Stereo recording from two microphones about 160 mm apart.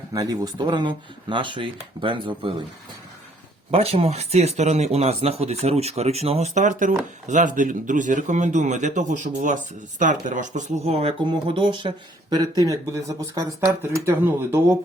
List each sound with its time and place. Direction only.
0.1 s speech: 20° right (ahead or behind)
3.7 s speech: 35° right (ahead or behind); by 14.8 s 15° right (ahead or behind)